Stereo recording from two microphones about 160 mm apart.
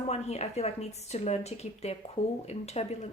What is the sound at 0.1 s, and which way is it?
Speech, 40° left (ahead or behind).